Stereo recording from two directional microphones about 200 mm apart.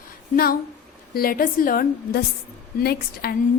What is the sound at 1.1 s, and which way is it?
A woman's voice, 45° left (ahead or behind).